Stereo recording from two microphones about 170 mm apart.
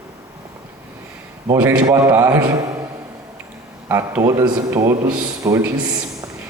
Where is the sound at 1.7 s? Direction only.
20° right (ahead or behind).